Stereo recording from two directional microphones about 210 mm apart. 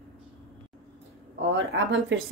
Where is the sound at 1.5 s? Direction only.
60° right (ahead or behind).